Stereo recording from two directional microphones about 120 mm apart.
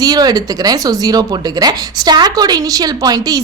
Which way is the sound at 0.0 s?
35° right (ahead or behind).